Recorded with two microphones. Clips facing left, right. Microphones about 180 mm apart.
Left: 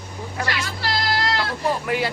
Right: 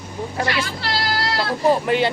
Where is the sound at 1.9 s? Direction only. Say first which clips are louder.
Right 4 dB; 25° right (ahead or behind).